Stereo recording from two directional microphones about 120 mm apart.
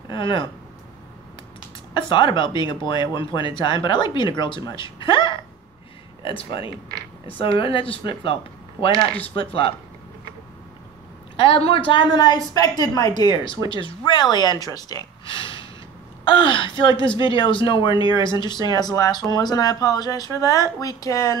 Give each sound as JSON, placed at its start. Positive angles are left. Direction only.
{"t": 0.1, "sound": "speech", "side_deg": 45}
{"t": 2.0, "sound": "speech", "side_deg": 40}
{"t": 11.3, "sound": "speech", "side_deg": 45}
{"t": 15.2, "sound": "gasp", "side_deg": 45}
{"t": 16.3, "sound": "speech", "side_deg": 45}